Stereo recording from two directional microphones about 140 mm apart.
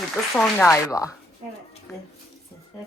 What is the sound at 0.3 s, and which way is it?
Speech, 10° left (ahead or behind).